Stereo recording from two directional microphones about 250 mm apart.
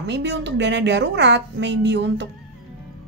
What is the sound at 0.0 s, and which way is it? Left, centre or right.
A woman's voice, right.